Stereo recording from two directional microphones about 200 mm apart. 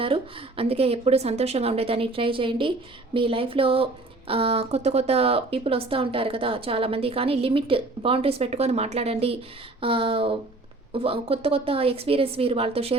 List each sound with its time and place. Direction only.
0.0 s speech: 30° right (ahead or behind)